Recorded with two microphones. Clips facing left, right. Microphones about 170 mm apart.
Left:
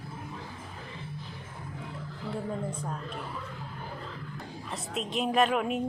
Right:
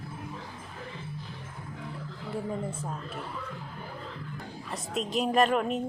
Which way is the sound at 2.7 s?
5° right (ahead or behind).